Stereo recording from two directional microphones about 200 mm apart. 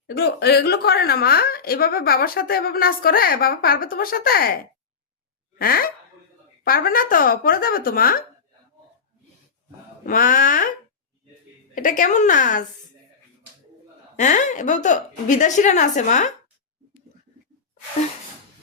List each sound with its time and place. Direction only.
0.1 s a woman's voice: 55° left (ahead or behind)
10.1 s a woman's voice: 45° left (ahead or behind)
11.7 s a woman's voice: 40° left (ahead or behind)
14.2 s a woman's voice: 40° left (ahead or behind)